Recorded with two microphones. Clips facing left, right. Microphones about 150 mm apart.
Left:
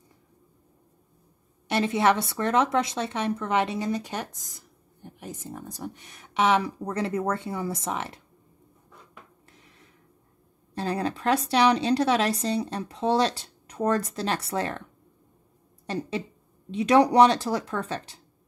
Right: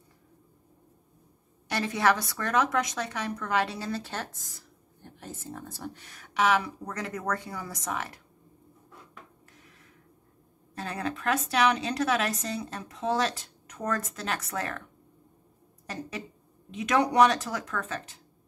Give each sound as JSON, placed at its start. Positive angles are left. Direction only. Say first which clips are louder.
{"t": 1.7, "sound": "speech", "louder": "left 3 dB", "side_deg": 25}
{"t": 9.5, "sound": "a sound", "louder": "even", "side_deg": 30}
{"t": 10.7, "sound": "speech", "louder": "left 5 dB", "side_deg": 30}
{"t": 15.9, "sound": "speech", "louder": "left 7 dB", "side_deg": 30}